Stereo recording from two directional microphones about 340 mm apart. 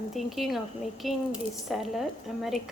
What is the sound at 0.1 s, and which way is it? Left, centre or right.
A woman's voice, centre.